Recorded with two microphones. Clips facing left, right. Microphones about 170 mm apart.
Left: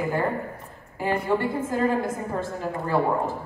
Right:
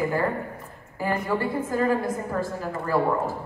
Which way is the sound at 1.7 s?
25° left (ahead or behind).